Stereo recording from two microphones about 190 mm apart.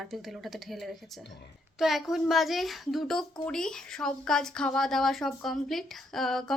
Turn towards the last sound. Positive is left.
turn(degrees=0)  # may be behind; listen again after turning